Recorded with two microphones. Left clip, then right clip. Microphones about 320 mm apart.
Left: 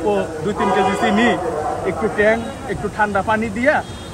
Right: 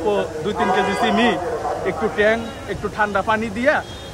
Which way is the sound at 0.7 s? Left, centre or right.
Centre.